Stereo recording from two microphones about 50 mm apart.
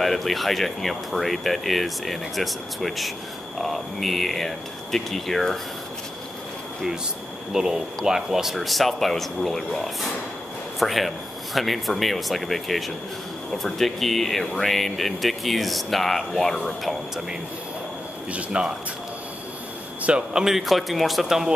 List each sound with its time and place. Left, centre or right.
0.0 s speech: centre
7.5 s speech: centre
18.3 s speech: centre
20.0 s speech: right
20.4 s speech: centre